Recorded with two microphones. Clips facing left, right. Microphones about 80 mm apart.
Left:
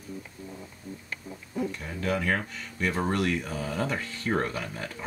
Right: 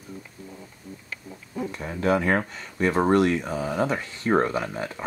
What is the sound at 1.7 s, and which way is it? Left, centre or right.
Speech, right.